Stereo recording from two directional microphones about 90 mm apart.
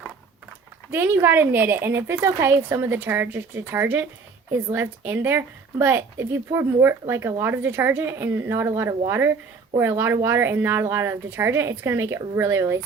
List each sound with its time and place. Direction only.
0.9 s a woman's voice: 25° right (ahead or behind)